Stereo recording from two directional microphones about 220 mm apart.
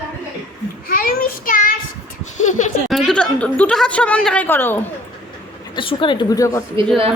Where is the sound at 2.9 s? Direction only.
Centre (ahead or behind).